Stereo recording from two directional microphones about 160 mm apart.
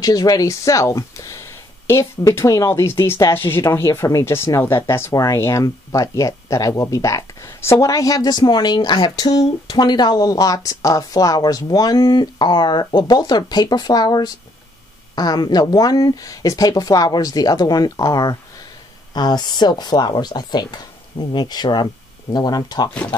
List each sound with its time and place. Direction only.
0.0 s speech: 25° left (ahead or behind)